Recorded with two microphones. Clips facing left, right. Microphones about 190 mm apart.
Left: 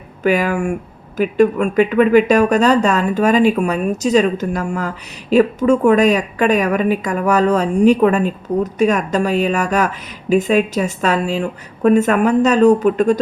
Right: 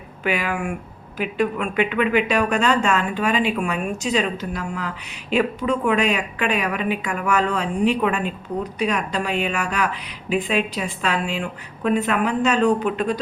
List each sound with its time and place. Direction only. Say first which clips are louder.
0.2 s speech: left 8 dB; 40° left (ahead or behind)